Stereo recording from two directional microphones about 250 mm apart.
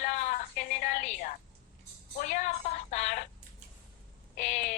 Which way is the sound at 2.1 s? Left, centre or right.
Left.